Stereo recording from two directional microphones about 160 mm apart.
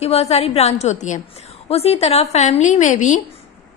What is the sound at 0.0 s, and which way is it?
A woman's voice, 40° left (ahead or behind).